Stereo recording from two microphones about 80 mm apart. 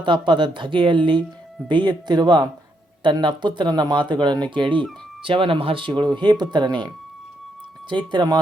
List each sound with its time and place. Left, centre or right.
0.0 s speech: right
1.6 s speech: right